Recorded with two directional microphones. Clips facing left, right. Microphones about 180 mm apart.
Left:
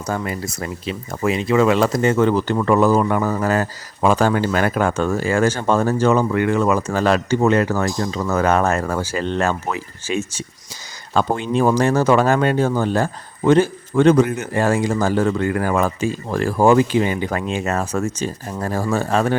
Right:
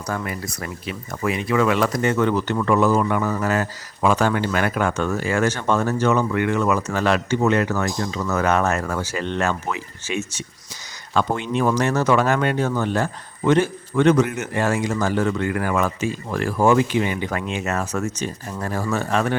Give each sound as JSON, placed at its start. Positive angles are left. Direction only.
{"t": 0.1, "sound": "speech", "side_deg": 25}